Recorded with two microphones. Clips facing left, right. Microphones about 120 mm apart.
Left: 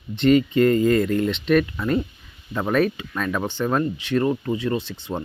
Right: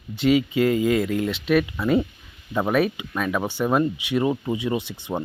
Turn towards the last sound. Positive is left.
turn(degrees=-15)  # may be behind; listen again after turning